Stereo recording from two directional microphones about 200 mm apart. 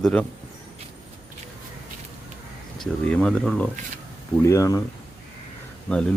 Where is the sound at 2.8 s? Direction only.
5° left (ahead or behind).